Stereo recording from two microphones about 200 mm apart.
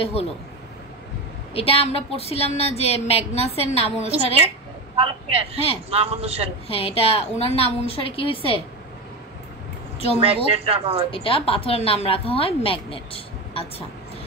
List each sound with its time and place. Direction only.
0.0 s a woman's voice: 30° left (ahead or behind)
1.5 s a woman's voice: 30° left (ahead or behind)
4.9 s speech: 30° right (ahead or behind)
6.7 s a woman's voice: 30° left (ahead or behind)
10.2 s speech: 30° right (ahead or behind)
11.1 s a woman's voice: 25° left (ahead or behind)